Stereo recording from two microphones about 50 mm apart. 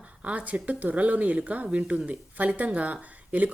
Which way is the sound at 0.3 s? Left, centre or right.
Right.